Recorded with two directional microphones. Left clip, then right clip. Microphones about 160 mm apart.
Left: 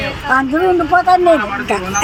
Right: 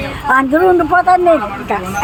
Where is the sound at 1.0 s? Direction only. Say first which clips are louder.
Left 1 dB; centre (ahead or behind).